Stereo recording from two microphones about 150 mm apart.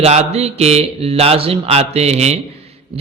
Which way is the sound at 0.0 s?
45° right (ahead or behind).